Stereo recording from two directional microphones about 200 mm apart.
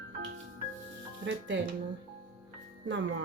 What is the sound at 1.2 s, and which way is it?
Speech, 65° right (ahead or behind).